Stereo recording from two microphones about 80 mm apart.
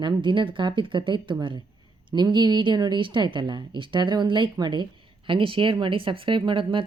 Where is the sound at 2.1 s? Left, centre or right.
Right.